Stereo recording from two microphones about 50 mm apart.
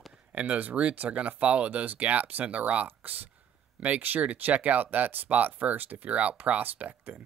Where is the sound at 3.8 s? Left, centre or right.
Right.